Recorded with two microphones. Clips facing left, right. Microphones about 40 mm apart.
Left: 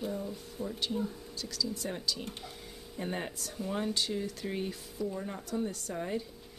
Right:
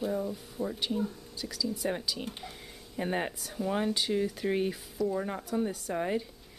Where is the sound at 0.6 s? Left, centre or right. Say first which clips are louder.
Right 3 dB; centre.